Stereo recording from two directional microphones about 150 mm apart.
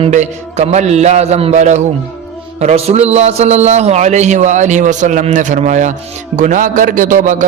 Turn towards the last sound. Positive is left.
turn(degrees=-60)  # may be behind; listen again after turning